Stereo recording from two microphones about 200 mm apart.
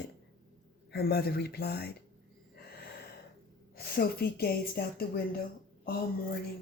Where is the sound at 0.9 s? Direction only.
50° left (ahead or behind).